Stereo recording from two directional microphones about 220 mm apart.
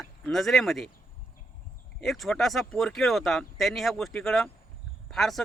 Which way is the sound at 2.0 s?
Centre (ahead or behind).